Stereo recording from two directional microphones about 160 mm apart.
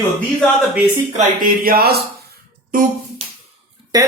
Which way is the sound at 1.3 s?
65° right (ahead or behind).